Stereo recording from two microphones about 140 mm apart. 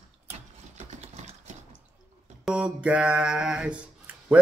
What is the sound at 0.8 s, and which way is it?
Vehicle, 50° right (ahead or behind).